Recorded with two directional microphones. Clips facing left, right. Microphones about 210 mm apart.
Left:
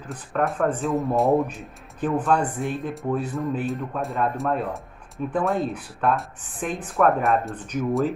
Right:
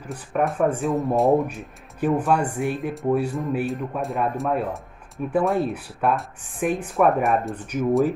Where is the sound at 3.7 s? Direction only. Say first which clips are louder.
Right 1 dB; centre (ahead or behind).